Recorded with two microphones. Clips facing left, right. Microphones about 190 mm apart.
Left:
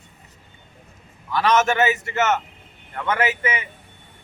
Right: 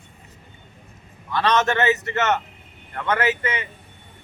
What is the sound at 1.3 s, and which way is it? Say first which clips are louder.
Speech: left 1 dB; 5° left (ahead or behind).